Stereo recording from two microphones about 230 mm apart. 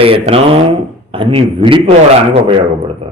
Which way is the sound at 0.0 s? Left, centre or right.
Right.